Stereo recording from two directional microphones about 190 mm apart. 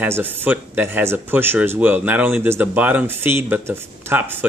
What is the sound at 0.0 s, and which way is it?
Speech, 10° right (ahead or behind).